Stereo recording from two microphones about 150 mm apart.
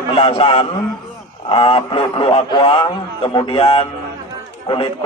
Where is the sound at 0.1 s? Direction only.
40° left (ahead or behind).